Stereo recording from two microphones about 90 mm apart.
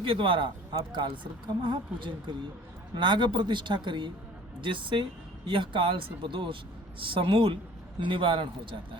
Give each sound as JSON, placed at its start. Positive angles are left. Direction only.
{"t": 0.0, "sound": "a woman's voice", "side_deg": -75}